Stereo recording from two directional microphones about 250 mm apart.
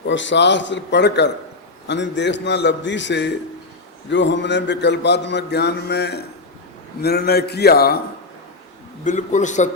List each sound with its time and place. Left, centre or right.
0.1 s a sound: left
7.0 s a man's voice: left
9.0 s a man's voice: left